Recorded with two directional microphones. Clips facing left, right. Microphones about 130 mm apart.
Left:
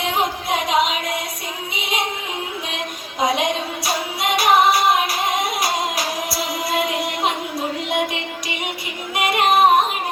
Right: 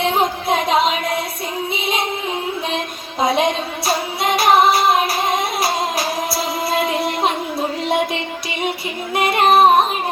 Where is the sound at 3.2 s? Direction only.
30° right (ahead or behind).